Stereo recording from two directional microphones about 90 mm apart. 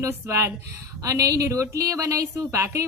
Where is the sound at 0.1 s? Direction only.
35° right (ahead or behind).